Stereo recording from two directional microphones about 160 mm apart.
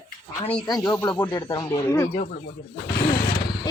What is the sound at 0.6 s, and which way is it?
Speech, 25° left (ahead or behind).